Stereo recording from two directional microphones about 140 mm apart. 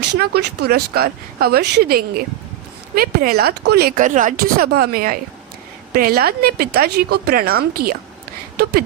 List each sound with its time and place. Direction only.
0.2 s speech: 90° right